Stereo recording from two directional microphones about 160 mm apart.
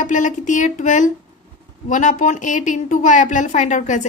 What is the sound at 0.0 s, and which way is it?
A woman's voice, 50° left (ahead or behind).